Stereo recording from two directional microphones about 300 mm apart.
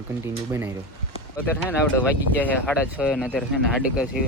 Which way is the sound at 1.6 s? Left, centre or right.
Centre.